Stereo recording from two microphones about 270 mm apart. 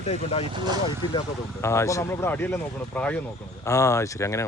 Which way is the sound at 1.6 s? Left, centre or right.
Centre.